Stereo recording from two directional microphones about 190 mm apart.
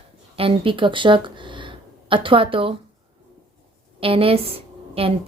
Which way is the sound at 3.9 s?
30° right (ahead or behind).